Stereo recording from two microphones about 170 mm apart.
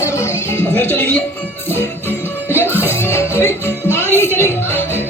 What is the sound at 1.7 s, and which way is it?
Music, 15° left (ahead or behind).